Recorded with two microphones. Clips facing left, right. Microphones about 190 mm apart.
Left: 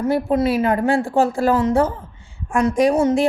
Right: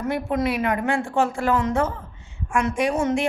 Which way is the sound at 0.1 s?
30° left (ahead or behind).